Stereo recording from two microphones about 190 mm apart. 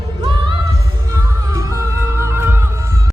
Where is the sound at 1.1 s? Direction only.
15° right (ahead or behind).